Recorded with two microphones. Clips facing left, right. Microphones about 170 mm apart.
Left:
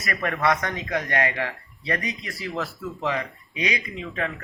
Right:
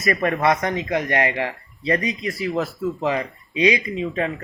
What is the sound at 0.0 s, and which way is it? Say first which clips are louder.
Speech: right 5 dB; 20° right (ahead or behind).